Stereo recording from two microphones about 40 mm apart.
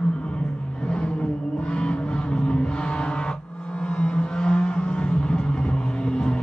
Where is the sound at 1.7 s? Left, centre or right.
Left.